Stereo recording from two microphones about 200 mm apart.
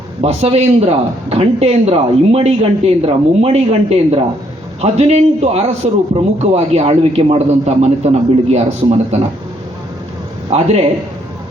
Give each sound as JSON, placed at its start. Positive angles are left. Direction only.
{"t": 0.2, "sound": "a man's voice", "side_deg": -30}
{"t": 10.5, "sound": "a man's voice", "side_deg": -30}